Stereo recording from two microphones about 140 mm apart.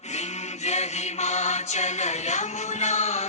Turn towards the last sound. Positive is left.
turn(degrees=55)  # may be behind; listen again after turning